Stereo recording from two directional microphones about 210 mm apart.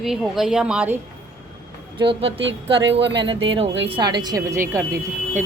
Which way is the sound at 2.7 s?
55° right (ahead or behind).